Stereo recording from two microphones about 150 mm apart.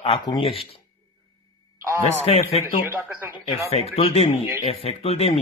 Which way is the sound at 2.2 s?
45° left (ahead or behind).